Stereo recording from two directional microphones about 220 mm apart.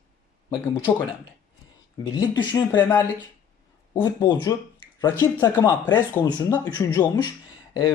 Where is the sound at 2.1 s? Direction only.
20° left (ahead or behind).